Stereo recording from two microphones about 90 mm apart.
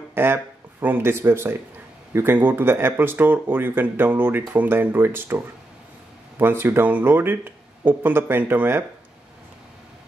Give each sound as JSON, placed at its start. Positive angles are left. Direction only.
{"t": 0.1, "sound": "speech", "side_deg": -25}